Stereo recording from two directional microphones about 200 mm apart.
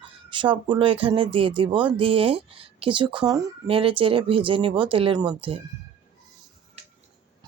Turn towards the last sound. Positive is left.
turn(degrees=-25)  # may be behind; listen again after turning